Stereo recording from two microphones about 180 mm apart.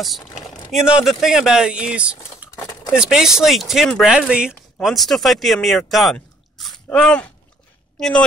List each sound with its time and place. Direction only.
0.0 s speech: centre (ahead or behind)
2.5 s a sound: 25° left (ahead or behind)
2.9 s speech: 5° right (ahead or behind)